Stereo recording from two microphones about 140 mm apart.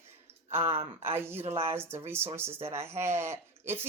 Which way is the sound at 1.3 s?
50° right (ahead or behind).